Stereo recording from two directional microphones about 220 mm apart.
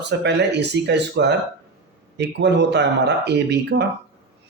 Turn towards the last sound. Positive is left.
turn(degrees=-50)  # may be behind; listen again after turning